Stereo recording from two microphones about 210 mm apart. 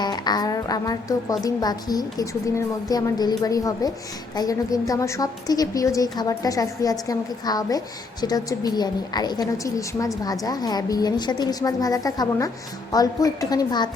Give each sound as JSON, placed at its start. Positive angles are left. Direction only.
{"t": 0.0, "sound": "a woman's voice", "side_deg": 20}